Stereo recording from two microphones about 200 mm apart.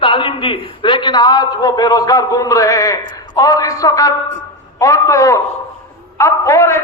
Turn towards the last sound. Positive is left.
turn(degrees=15)  # may be behind; listen again after turning